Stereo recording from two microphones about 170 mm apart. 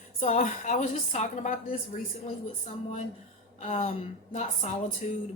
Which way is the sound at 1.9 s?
40° left (ahead or behind).